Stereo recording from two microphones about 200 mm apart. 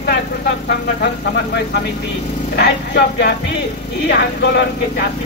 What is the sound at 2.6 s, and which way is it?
Speech, 55° left (ahead or behind).